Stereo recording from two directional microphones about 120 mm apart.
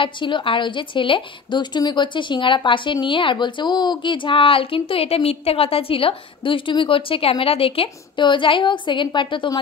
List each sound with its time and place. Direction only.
0.0 s a woman's voice: 45° left (ahead or behind)